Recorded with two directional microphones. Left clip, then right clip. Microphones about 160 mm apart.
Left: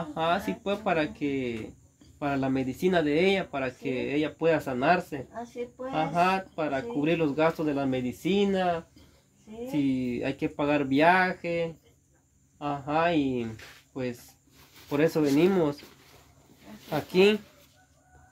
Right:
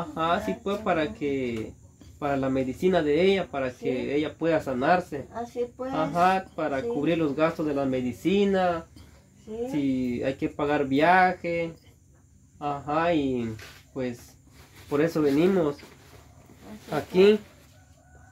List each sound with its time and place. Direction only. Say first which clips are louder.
0.1 s speech: right 1 dB; 80° left
9.7 s speech: even; 70° left (ahead or behind)
14.9 s speech: right 1 dB; 70° left (ahead or behind)
17.1 s speech: right 3 dB; 90° left